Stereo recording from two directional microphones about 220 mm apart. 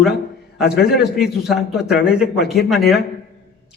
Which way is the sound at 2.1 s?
5° right (ahead or behind).